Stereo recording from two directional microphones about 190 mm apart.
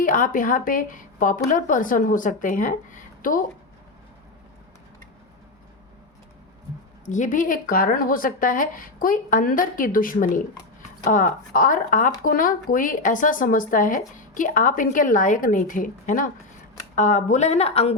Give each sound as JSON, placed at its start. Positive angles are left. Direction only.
{"t": 0.0, "sound": "speech", "side_deg": 45}
{"t": 7.0, "sound": "speech", "side_deg": 40}